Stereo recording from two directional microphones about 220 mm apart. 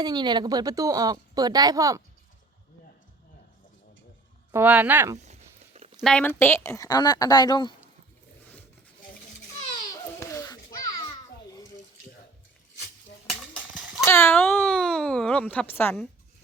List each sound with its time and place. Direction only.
0.0 s speech: 20° right (ahead or behind)
4.5 s speech: 10° right (ahead or behind)
5.1 s a sound: 30° right (ahead or behind)
6.0 s speech: 5° left (ahead or behind); by 7.7 s 20° left (ahead or behind)
9.9 s babbling: 15° left (ahead or behind)
11.5 s bathtub: 15° left (ahead or behind)
14.0 s speech: 10° left (ahead or behind)